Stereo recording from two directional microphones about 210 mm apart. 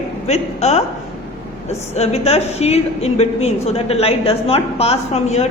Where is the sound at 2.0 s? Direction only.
30° left (ahead or behind).